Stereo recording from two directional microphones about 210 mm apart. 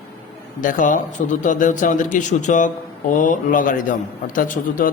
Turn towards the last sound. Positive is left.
turn(degrees=40)  # may be behind; listen again after turning